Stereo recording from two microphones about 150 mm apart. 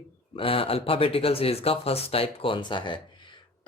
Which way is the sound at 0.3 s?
40° left (ahead or behind).